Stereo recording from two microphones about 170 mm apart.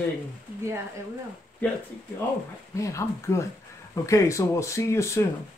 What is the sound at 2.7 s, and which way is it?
Speech, 20° left (ahead or behind).